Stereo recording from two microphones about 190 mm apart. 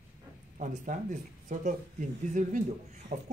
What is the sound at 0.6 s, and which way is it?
Speech, 40° right (ahead or behind).